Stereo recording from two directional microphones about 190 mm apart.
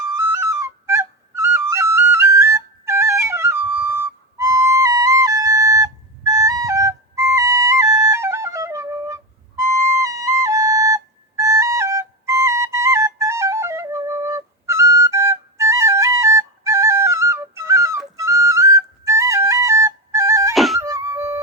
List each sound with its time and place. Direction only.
0.2 s flute: 15° right (ahead or behind)
20.5 s music: centre (ahead or behind)
20.8 s music: 15° right (ahead or behind)